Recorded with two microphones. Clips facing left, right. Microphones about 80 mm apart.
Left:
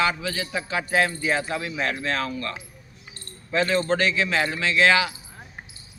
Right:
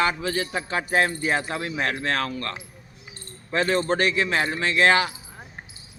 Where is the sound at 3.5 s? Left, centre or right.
Right.